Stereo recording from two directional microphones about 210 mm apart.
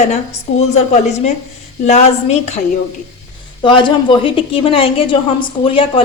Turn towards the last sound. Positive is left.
turn(degrees=25)  # may be behind; listen again after turning